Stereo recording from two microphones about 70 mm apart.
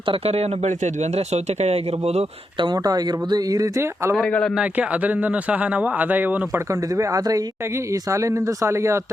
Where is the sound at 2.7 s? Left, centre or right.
Right.